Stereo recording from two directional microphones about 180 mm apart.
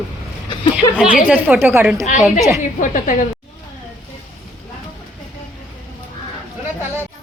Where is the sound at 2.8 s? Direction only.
45° left (ahead or behind).